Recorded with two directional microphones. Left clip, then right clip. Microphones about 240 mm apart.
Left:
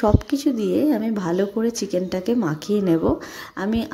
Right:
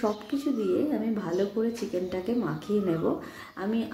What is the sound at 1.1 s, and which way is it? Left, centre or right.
A woman's voice, left.